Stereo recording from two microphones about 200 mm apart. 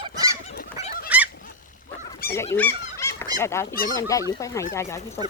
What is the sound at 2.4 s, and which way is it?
Speech, 10° left (ahead or behind).